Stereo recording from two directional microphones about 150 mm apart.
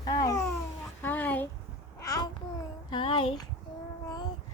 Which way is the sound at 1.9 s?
25° left (ahead or behind).